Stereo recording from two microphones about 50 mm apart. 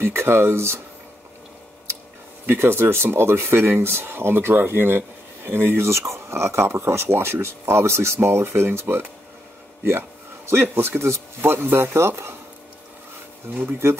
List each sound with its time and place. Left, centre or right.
0.0 s speech: right
2.6 s speech: right
11.9 s speech: right
13.8 s speech: right